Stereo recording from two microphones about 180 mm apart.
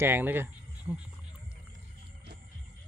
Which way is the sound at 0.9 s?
5° right (ahead or behind).